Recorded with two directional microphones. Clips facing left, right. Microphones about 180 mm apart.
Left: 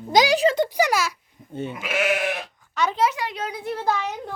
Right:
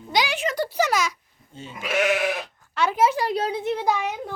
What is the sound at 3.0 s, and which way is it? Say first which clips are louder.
Speech: right 3 dB; 35° right (ahead or behind).